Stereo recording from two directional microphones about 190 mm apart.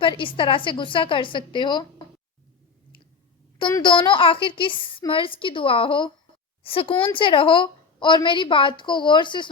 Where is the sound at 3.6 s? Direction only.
25° left (ahead or behind).